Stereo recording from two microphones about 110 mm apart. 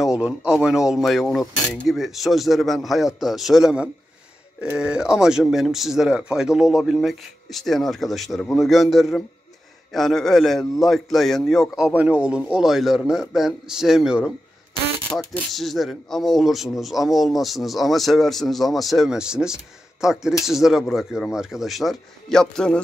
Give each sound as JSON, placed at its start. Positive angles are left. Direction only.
{"t": 0.0, "sound": "speech", "side_deg": -5}
{"t": 15.0, "sound": "speech", "side_deg": 5}